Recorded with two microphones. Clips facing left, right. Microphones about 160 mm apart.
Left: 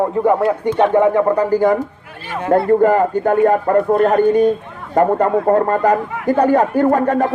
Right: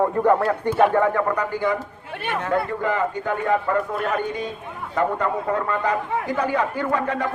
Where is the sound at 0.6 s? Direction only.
5° right (ahead or behind).